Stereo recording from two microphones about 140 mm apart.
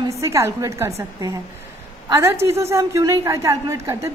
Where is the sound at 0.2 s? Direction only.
20° right (ahead or behind).